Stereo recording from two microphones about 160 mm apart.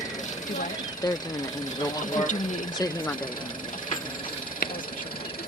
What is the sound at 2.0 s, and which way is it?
Speech, 55° left (ahead or behind).